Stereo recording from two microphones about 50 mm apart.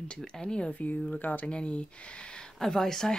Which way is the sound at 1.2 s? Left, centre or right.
Left.